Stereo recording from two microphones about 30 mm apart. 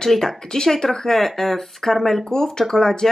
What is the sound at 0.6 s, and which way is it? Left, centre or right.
Speech, centre.